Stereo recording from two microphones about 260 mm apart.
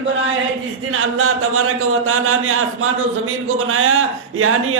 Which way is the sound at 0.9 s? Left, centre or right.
Right.